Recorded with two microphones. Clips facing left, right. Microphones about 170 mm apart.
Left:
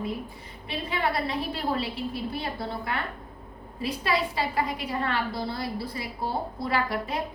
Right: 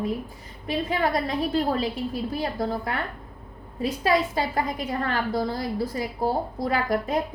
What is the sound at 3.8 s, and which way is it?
A woman's voice, 45° right (ahead or behind).